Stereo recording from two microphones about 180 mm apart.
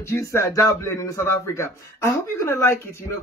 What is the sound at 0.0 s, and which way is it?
A man's voice, 15° left (ahead or behind).